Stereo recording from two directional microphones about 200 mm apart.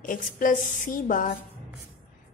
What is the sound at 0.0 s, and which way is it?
A woman's voice, 40° left (ahead or behind).